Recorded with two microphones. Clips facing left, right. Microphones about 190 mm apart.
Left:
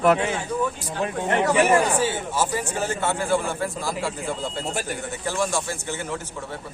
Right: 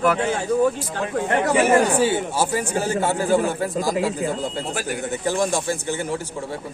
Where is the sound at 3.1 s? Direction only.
40° right (ahead or behind).